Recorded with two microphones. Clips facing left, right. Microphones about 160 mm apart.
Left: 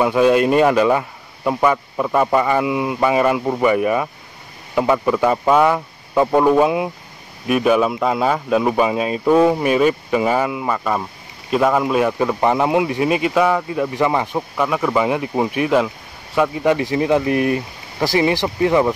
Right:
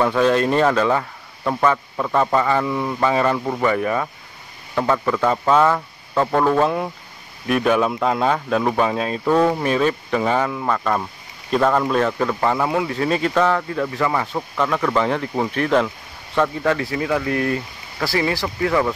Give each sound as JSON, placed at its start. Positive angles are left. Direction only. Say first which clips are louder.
{"t": 0.0, "sound": "speech", "louder": "left 3 dB", "side_deg": 10}